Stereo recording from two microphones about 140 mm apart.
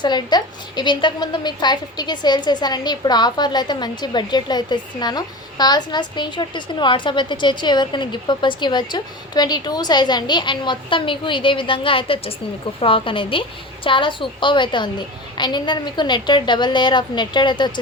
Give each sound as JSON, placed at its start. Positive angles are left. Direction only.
{"t": 0.0, "sound": "a woman's voice", "side_deg": 30}